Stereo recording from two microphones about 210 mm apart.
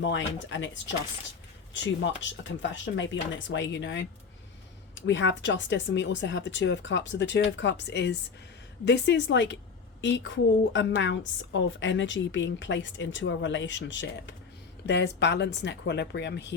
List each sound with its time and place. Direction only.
0.0 s speech: 60° left (ahead or behind)
5.0 s speech: 60° left (ahead or behind)